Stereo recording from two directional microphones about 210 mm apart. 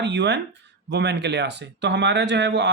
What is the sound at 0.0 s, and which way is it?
Speech, 55° right (ahead or behind).